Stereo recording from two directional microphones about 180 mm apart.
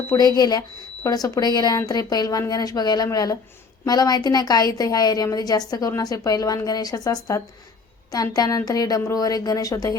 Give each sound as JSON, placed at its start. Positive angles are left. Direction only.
{"t": 0.1, "sound": "a woman's voice", "side_deg": 20}